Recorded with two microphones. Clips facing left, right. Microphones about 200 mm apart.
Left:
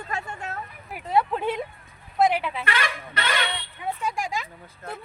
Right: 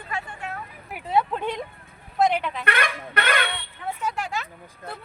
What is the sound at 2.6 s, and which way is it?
Speech, 55° right (ahead or behind).